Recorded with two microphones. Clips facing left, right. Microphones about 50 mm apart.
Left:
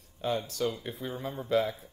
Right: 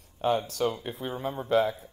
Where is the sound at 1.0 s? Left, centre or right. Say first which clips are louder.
Right 4 dB; right.